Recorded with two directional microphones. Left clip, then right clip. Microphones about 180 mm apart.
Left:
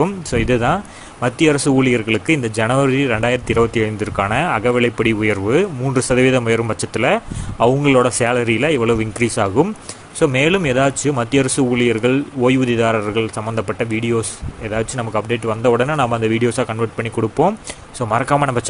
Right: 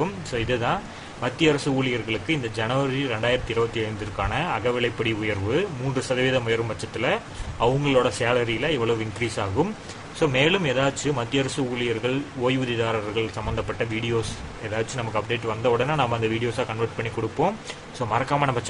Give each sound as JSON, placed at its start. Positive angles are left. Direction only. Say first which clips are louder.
{"t": 0.0, "sound": "speech", "louder": "left 8 dB", "side_deg": 40}